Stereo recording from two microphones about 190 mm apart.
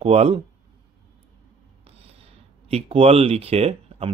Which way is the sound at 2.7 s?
30° right (ahead or behind).